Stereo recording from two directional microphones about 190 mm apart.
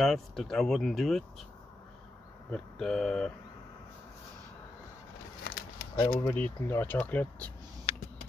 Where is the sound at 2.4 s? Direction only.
5° left (ahead or behind).